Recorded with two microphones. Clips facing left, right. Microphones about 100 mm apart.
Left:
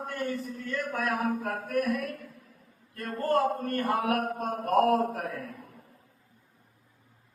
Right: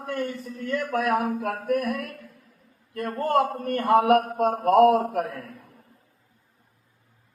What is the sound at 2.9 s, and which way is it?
A man's voice, 75° right (ahead or behind).